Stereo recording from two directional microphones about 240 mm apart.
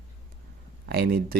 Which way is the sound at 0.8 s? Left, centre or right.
Right.